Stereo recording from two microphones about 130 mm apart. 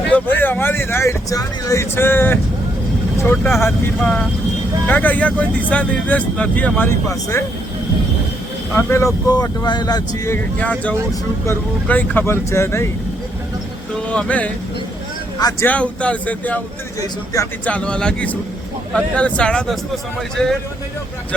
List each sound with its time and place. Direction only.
0.1 s speech: 15° left (ahead or behind)
3.6 s speech: 10° left (ahead or behind)
8.7 s speech: 20° left (ahead or behind)
10.3 s speech: 10° left (ahead or behind)
13.9 s speech: 10° left (ahead or behind)
15.6 s speech: 10° left (ahead or behind)
17.0 s speech: 25° left (ahead or behind)
17.7 s a man's voice: 5° left (ahead or behind)